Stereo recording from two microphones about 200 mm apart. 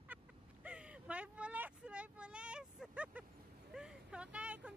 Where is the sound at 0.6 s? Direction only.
5° right (ahead or behind).